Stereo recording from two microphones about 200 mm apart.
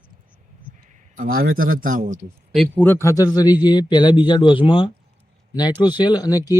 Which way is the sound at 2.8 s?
10° left (ahead or behind).